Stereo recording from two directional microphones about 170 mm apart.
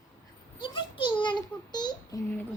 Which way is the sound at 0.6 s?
30° left (ahead or behind).